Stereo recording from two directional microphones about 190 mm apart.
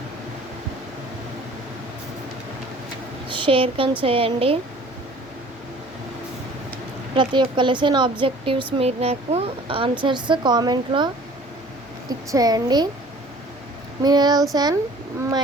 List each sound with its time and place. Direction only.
3.2 s a woman's voice: 25° right (ahead or behind)
7.2 s speech: 25° right (ahead or behind)
14.0 s speech: 20° right (ahead or behind)